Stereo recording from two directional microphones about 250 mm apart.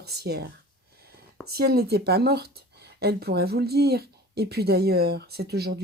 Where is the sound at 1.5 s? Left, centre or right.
Right.